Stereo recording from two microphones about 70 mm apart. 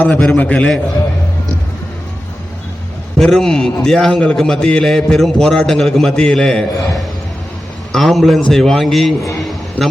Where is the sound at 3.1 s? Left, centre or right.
Centre.